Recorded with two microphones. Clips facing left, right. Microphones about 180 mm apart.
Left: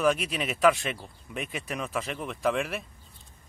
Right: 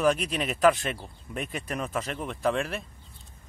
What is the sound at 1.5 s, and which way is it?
Speech, 40° right (ahead or behind).